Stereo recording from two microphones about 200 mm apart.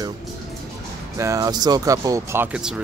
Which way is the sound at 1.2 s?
15° right (ahead or behind).